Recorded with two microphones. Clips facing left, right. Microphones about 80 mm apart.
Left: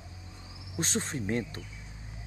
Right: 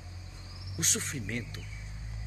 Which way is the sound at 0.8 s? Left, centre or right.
Left.